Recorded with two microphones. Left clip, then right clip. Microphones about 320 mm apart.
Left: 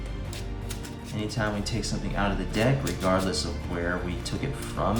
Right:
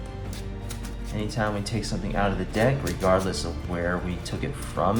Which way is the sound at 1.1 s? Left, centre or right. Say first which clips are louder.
Right 2 dB; centre.